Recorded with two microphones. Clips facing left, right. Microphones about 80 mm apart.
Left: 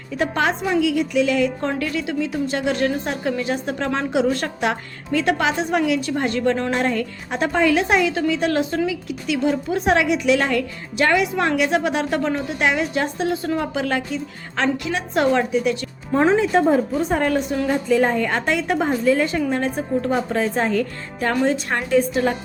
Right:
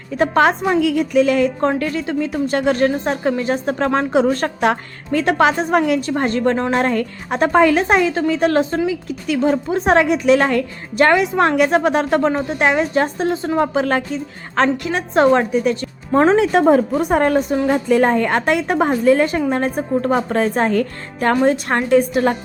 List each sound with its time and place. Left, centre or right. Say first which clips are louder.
0.2 s a woman's voice: right 6 dB; right
13.3 s a woman's voice: right 2 dB; right
13.6 s a woman's voice: right 6 dB; right
16.4 s a woman's voice: right 4 dB; right
17.7 s a woman's voice: right 3 dB; right